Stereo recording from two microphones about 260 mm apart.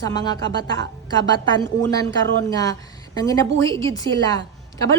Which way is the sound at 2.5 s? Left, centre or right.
Centre.